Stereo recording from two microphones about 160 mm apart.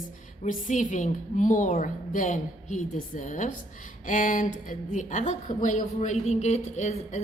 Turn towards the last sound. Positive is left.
turn(degrees=45)  # may be behind; listen again after turning